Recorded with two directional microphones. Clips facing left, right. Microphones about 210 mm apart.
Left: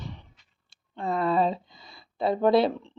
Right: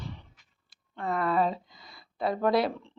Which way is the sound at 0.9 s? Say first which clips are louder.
Left 2 dB; 25° left (ahead or behind).